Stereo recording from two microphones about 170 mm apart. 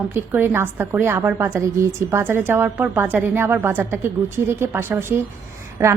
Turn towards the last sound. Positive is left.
turn(degrees=-15)  # may be behind; listen again after turning